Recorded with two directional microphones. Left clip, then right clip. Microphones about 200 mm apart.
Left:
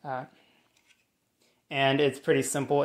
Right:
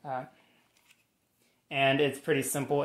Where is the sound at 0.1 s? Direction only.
40° left (ahead or behind).